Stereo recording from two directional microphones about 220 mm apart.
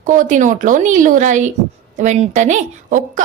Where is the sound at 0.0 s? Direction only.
35° right (ahead or behind).